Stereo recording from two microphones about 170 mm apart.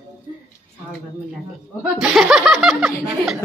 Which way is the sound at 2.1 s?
Centre (ahead or behind).